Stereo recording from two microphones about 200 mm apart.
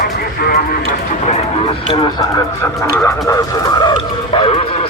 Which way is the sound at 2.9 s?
15° left (ahead or behind).